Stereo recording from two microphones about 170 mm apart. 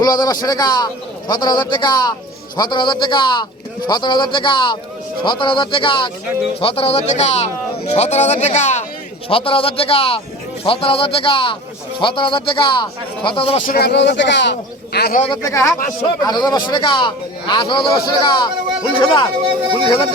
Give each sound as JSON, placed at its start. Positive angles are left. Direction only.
{"t": 0.0, "sound": "speech", "side_deg": 25}
{"t": 9.3, "sound": "speech", "side_deg": 30}
{"t": 13.7, "sound": "speech", "side_deg": 70}
{"t": 14.9, "sound": "speech", "side_deg": 65}
{"t": 15.3, "sound": "speech", "side_deg": 20}